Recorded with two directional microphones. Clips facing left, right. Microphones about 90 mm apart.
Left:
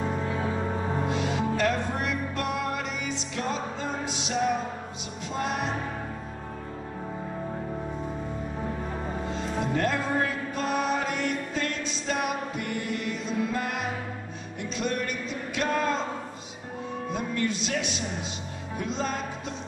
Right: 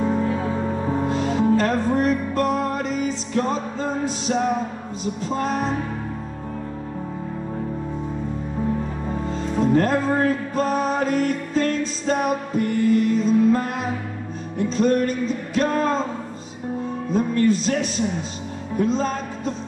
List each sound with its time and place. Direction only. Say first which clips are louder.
1.0 s music: right 10 dB; 40° right (ahead or behind)
9.3 s music: right 10 dB; 40° right (ahead or behind)
14.7 s music: right 10 dB; 40° right (ahead or behind)
17.1 s music: right 11 dB; 40° right (ahead or behind)